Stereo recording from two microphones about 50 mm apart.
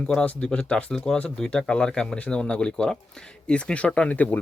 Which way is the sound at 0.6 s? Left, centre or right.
Left.